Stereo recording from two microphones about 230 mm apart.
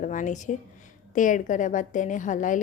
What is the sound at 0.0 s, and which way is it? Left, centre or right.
A woman's voice, left.